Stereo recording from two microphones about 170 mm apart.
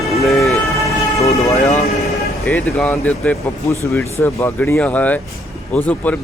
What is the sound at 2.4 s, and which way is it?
Speech, 10° left (ahead or behind).